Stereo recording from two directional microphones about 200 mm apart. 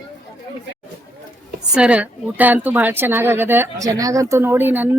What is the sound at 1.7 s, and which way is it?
A woman's voice, 5° right (ahead or behind).